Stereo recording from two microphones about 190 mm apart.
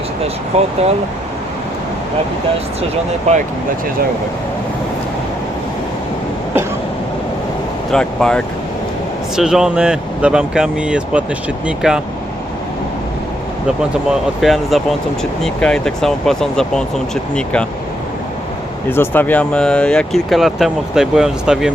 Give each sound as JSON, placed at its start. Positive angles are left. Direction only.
{"t": 0.5, "sound": "speech", "side_deg": -35}
{"t": 3.3, "sound": "speech", "side_deg": -35}
{"t": 7.9, "sound": "speech", "side_deg": 5}
{"t": 14.1, "sound": "speech", "side_deg": 0}
{"t": 18.9, "sound": "speech", "side_deg": 10}